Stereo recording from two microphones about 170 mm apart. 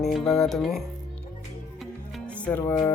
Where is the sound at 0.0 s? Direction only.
5° left (ahead or behind).